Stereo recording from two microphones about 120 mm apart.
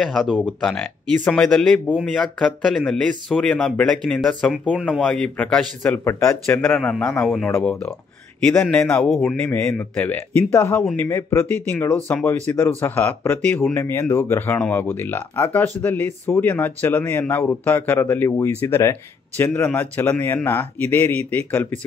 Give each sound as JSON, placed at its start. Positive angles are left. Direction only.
{"t": 0.0, "sound": "speech", "side_deg": 0}
{"t": 6.0, "sound": "speech", "side_deg": 20}
{"t": 10.8, "sound": "speech", "side_deg": 5}
{"t": 11.1, "sound": "speech", "side_deg": 20}